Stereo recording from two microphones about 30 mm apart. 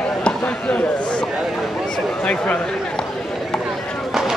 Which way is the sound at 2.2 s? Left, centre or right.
Left.